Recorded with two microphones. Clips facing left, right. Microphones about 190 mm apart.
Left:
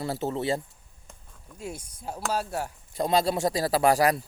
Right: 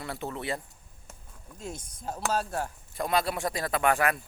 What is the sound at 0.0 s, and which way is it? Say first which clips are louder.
Speech: left 6 dB; 30° left (ahead or behind).